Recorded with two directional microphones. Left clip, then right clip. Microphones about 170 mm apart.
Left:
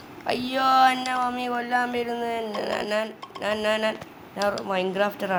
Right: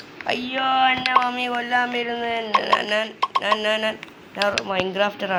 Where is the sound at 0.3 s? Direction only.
15° left (ahead or behind).